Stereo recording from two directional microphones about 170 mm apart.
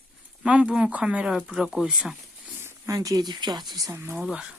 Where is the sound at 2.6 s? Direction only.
15° right (ahead or behind).